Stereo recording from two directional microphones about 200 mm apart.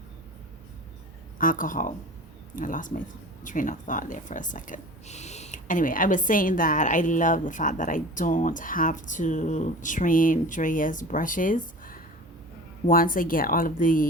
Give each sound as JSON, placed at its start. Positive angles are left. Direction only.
{"t": 1.4, "sound": "speech", "side_deg": 40}